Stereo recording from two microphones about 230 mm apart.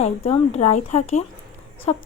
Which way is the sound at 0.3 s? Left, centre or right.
Left.